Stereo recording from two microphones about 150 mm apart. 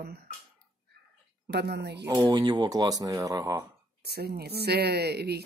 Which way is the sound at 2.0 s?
25° right (ahead or behind).